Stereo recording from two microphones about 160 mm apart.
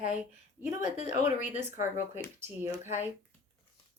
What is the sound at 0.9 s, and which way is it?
Speech, 45° left (ahead or behind).